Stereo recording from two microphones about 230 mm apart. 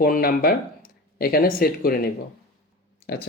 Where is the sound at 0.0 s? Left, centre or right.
Left.